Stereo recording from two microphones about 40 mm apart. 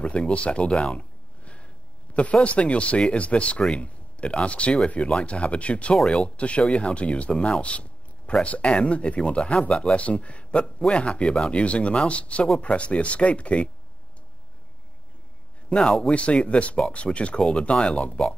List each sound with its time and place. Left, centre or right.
0.0 s speech: left
0.9 s a sound: left
2.4 s speech: left
16.1 s speech: left